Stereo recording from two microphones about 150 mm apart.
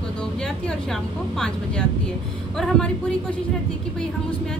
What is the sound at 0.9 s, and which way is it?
Speech, 5° left (ahead or behind).